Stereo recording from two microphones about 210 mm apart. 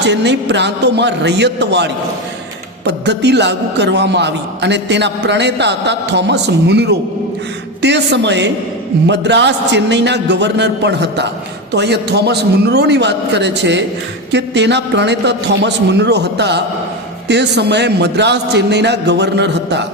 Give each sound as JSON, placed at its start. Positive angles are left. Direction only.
{"t": 0.0, "sound": "a man's voice", "side_deg": -55}